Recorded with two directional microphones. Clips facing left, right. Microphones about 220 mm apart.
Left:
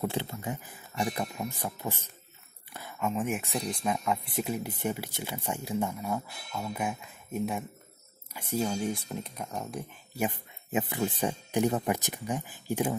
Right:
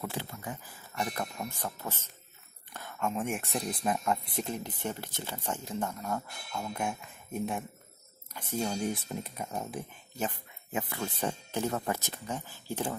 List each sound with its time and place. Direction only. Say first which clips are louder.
0.0 s speech: left 5 dB; 25° left (ahead or behind); by 9.8 s 5° right (ahead or behind)
10.1 s speech: left 4 dB; 15° left (ahead or behind)